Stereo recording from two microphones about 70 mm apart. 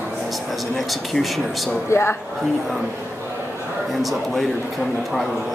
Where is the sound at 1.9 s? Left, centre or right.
Left.